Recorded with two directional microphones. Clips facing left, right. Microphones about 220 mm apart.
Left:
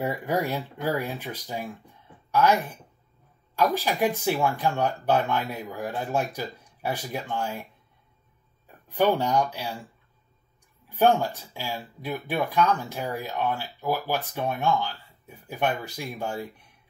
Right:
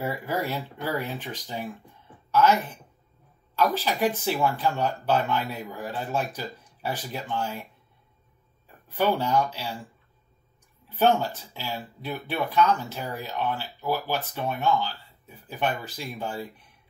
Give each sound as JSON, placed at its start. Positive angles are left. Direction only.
{"t": 0.0, "sound": "speech", "side_deg": 15}
{"t": 8.8, "sound": "speech", "side_deg": 15}
{"t": 10.9, "sound": "speech", "side_deg": 10}